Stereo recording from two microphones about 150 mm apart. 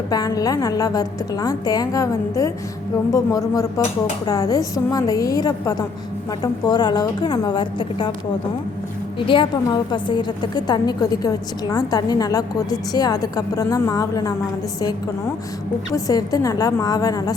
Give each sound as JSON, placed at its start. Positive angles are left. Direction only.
{"t": 0.1, "sound": "a woman's voice", "side_deg": 25}
{"t": 9.1, "sound": "a woman's voice", "side_deg": 35}
{"t": 16.0, "sound": "a woman's voice", "side_deg": 25}